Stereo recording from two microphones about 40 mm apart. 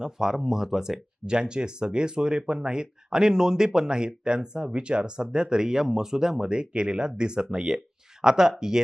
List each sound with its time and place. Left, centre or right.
0.0 s speech: centre